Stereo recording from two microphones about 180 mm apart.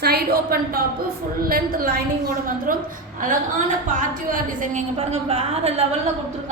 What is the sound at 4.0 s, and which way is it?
A woman's voice, 45° right (ahead or behind).